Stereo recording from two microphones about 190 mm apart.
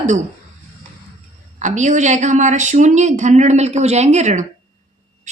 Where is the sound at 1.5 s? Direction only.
40° right (ahead or behind).